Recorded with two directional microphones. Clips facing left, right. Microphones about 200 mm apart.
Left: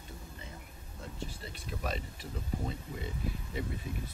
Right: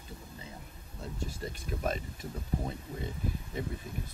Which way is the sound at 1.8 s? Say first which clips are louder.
Right 4 dB; 45° right (ahead or behind).